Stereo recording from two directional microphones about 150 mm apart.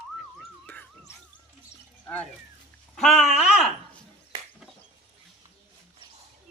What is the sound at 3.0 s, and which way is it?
Speech, centre (ahead or behind).